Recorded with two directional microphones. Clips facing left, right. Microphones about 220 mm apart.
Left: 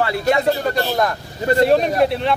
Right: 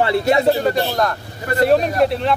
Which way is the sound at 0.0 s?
25° right (ahead or behind).